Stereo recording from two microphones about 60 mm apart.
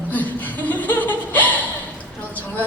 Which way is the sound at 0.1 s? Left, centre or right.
Left.